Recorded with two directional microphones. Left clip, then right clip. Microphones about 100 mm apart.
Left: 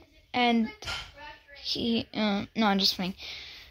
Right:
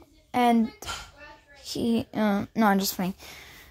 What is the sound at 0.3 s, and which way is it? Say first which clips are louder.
A woman's voice: right 3 dB; 40° right (ahead or behind).